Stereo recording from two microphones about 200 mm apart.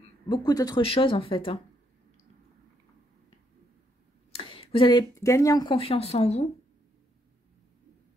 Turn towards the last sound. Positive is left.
turn(degrees=30)  # may be behind; listen again after turning